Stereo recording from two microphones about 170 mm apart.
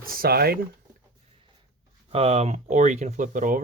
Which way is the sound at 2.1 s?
40° right (ahead or behind).